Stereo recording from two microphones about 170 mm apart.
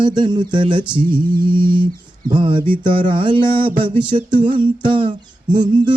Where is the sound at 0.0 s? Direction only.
25° right (ahead or behind).